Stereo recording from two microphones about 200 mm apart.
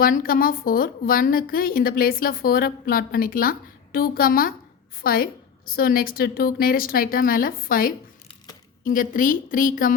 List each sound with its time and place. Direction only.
0.0 s a woman's voice: 45° left (ahead or behind)